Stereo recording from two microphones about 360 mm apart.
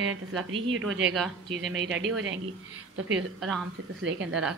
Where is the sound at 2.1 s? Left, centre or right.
Right.